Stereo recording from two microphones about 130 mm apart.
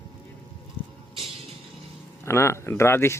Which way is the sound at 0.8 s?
35° right (ahead or behind).